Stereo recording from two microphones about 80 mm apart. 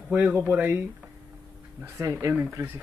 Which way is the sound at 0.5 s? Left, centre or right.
Right.